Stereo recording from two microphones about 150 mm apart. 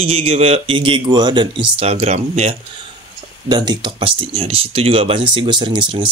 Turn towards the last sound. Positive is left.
turn(degrees=-30)  # may be behind; listen again after turning